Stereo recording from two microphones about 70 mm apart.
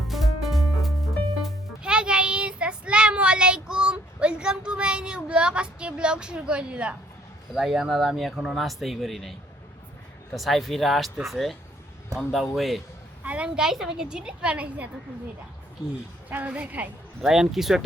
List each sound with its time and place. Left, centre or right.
0.1 s music: centre
1.8 s child singing: centre
7.5 s speech: centre
10.3 s speech: centre
13.2 s a woman's voice: centre
16.3 s a woman's voice: right
17.2 s a woman's voice: centre